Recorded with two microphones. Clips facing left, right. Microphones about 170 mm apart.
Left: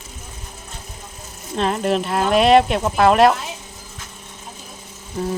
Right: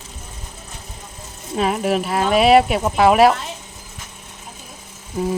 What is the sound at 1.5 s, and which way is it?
Speech, 5° right (ahead or behind).